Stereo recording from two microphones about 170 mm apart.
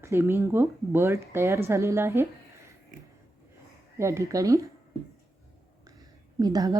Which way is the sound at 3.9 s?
15° right (ahead or behind).